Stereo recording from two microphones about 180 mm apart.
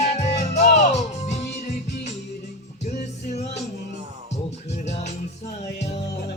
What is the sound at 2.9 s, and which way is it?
Music, 40° left (ahead or behind).